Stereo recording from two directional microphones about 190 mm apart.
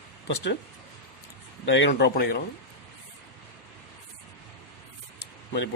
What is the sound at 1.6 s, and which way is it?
Speech, 70° left (ahead or behind).